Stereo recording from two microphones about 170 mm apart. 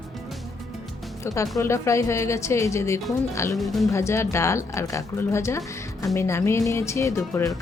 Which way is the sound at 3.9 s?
15° left (ahead or behind).